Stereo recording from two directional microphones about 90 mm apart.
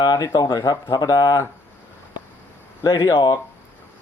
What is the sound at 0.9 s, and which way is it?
Speech, 40° left (ahead or behind).